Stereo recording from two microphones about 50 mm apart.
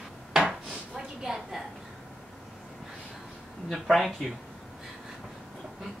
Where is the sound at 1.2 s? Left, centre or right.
Centre.